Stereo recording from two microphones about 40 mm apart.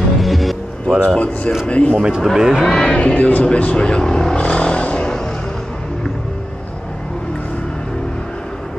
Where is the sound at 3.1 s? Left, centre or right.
Left.